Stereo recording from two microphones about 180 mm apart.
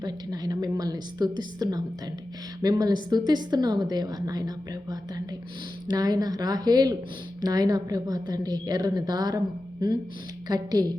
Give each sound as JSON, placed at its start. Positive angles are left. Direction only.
{"t": 0.0, "sound": "a woman's voice", "side_deg": -20}